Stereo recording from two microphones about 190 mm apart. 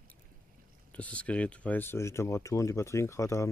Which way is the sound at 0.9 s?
5° left (ahead or behind).